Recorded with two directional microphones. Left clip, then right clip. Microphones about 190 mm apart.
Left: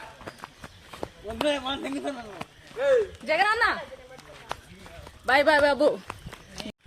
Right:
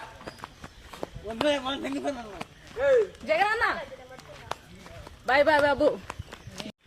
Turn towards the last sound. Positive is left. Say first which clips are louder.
# left 1 dB
turn(degrees=10)  # may be behind; listen again after turning